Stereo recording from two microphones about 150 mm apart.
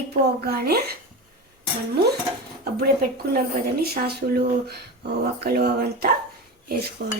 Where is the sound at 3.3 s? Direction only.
85° right.